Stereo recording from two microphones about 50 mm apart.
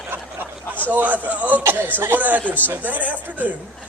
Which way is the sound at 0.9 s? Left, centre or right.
Right.